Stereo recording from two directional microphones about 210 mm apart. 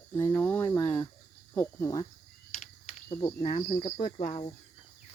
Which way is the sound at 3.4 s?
35° left (ahead or behind).